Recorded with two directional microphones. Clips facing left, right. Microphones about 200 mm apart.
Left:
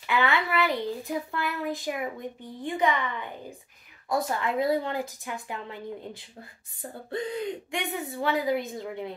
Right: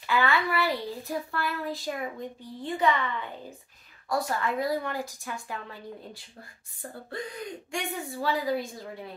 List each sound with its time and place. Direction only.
0.0 s a child's voice: 20° left (ahead or behind)